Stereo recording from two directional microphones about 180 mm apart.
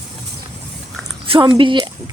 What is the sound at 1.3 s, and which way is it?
Speech, 25° right (ahead or behind).